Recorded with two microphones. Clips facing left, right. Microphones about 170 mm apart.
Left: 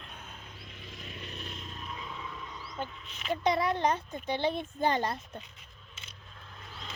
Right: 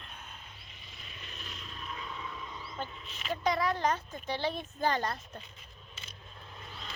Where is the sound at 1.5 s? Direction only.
20° left (ahead or behind).